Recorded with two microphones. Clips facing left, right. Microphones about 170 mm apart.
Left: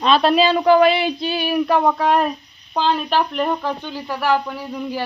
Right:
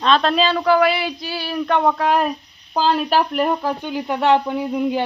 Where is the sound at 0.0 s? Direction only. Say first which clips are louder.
Left 2 dB; 10° left (ahead or behind).